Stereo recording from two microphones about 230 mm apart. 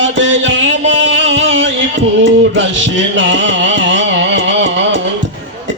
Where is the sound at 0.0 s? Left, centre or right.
Right.